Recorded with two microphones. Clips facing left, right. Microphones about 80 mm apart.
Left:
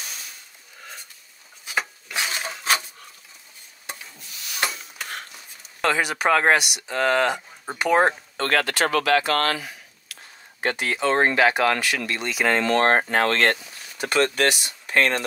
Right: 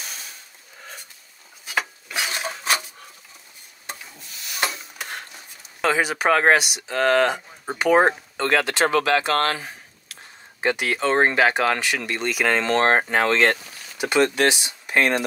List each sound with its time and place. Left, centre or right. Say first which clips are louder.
1.7 s a sound: right 1 dB; centre
5.8 s speech: right 1 dB; centre; by 10.1 s right
10.6 s speech: right 2 dB; centre; by 12.9 s right
12.9 s speech: right 1 dB; centre